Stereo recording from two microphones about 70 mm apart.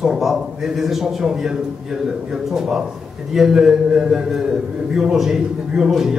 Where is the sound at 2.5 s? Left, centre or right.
Centre.